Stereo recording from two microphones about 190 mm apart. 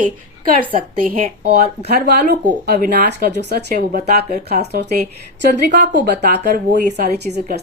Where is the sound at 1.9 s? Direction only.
55° right (ahead or behind).